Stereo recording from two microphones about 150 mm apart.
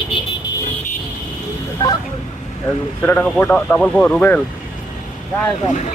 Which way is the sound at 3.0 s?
10° left (ahead or behind).